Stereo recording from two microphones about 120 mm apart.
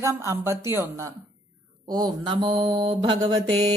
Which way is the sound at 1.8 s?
35° right (ahead or behind).